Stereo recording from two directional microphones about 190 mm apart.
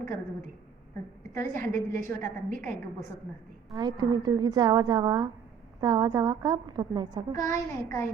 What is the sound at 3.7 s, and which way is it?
A woman's voice, 20° right (ahead or behind).